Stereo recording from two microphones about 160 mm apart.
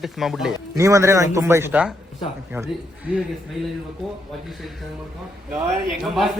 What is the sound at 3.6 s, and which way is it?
Speech, centre (ahead or behind).